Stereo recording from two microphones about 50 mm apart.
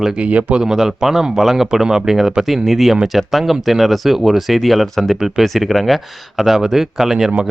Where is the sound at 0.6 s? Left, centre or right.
Centre.